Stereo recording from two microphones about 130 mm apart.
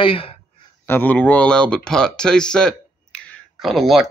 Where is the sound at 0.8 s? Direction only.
15° left (ahead or behind).